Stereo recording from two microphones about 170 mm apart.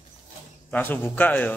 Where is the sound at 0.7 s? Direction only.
10° left (ahead or behind).